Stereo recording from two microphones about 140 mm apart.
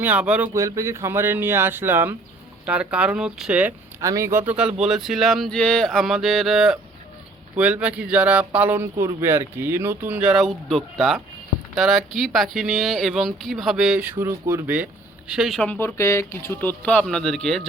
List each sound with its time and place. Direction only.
0.0 s speech: 10° right (ahead or behind)
0.5 s speech: 20° right (ahead or behind)
4.0 s speech: 20° right (ahead or behind); by 14.0 s centre (ahead or behind)
14.0 s speech: 15° right (ahead or behind)
15.3 s speech: centre (ahead or behind)